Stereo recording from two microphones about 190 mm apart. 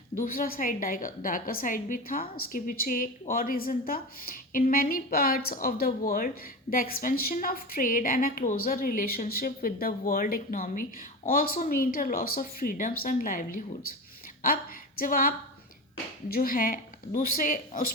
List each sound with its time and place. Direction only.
0.2 s a woman's voice: 50° left (ahead or behind)
16.3 s a woman's voice: 50° left (ahead or behind)